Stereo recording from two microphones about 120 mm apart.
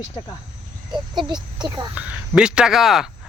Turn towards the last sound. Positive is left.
turn(degrees=0)  # may be behind; listen again after turning